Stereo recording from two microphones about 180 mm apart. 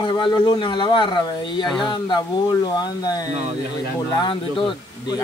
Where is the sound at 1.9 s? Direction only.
25° left (ahead or behind).